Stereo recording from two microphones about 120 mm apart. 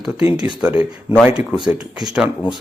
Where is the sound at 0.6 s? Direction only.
15° right (ahead or behind).